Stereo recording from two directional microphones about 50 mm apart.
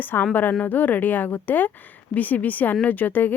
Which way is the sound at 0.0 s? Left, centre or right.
Left.